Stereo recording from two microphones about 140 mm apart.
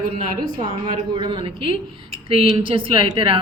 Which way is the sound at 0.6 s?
35° right (ahead or behind).